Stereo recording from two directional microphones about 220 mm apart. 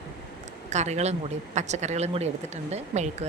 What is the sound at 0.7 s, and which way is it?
A woman's voice, 30° right (ahead or behind).